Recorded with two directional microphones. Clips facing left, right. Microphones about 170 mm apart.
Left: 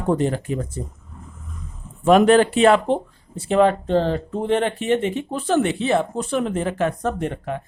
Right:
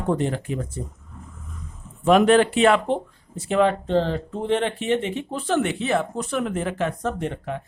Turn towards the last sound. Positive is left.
turn(degrees=50)  # may be behind; listen again after turning